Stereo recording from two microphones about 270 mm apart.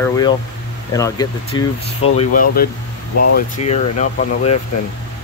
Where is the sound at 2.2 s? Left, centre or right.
Left.